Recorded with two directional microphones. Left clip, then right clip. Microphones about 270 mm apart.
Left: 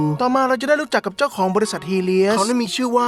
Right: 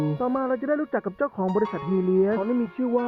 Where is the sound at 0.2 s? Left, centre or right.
Left.